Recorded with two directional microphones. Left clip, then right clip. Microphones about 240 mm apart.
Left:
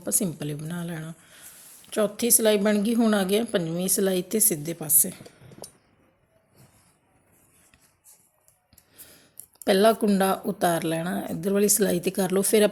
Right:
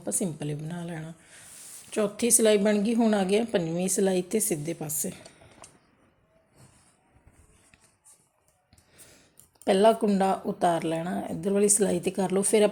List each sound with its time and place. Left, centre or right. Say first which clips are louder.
0.0 s a woman's voice: left 2 dB; centre
9.6 s a woman's voice: left 1 dB; centre